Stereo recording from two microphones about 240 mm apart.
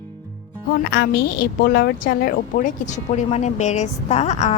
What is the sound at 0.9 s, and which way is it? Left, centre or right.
A woman's voice, left.